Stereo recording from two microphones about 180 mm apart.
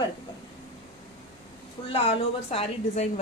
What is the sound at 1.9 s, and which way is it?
A woman's voice, 35° left (ahead or behind).